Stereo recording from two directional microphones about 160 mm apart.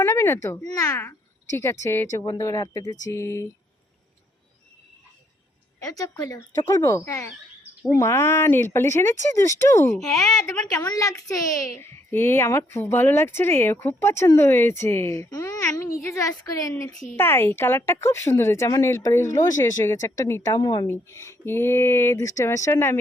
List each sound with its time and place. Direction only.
0.0 s a woman's voice: 15° left (ahead or behind)
5.8 s a woman's voice: 20° left (ahead or behind)